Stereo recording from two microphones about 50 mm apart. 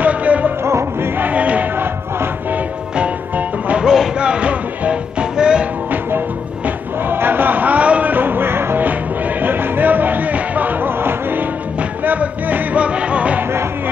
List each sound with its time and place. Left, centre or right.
0.0 s music: right
1.2 s a sound: right
3.0 s music: right
3.8 s music: centre
7.1 s a sound: right
8.1 s a sound: right
9.4 s music: right
11.0 s music: right
12.0 s music: right